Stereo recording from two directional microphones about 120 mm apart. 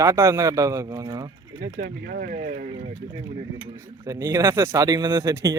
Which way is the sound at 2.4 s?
90° right.